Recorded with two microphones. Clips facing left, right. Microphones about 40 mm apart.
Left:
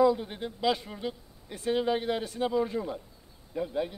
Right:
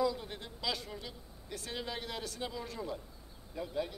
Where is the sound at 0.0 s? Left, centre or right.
Left.